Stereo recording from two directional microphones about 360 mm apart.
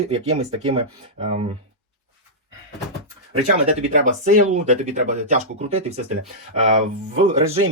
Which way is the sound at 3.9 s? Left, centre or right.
Right.